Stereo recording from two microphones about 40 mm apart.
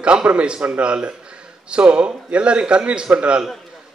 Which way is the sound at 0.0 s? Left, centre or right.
Right.